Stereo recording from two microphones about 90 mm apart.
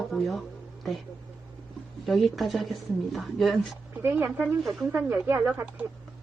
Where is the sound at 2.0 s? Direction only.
Centre (ahead or behind).